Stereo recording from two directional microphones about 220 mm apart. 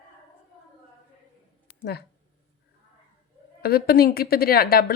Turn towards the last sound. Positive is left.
turn(degrees=45)  # may be behind; listen again after turning